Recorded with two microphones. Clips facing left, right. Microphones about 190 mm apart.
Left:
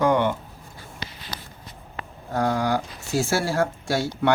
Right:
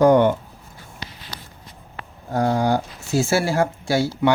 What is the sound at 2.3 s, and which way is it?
Speech, 25° right (ahead or behind).